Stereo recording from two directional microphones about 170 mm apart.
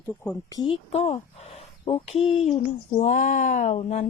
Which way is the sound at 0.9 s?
40° left (ahead or behind).